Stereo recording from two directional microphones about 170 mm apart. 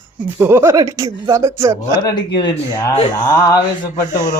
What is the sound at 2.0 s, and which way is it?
Speech, 25° left (ahead or behind).